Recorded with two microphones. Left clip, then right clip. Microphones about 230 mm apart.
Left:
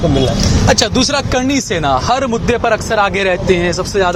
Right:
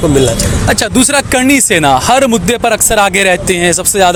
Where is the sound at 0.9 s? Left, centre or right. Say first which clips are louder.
Right 4 dB; right.